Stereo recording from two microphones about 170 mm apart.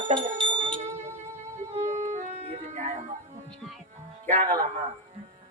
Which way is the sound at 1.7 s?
45° right (ahead or behind).